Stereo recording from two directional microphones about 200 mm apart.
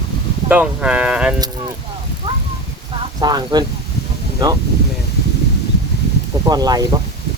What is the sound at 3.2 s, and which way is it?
Speech, 20° right (ahead or behind).